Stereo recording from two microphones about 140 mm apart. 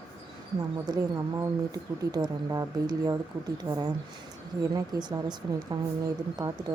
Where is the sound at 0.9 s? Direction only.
25° right (ahead or behind).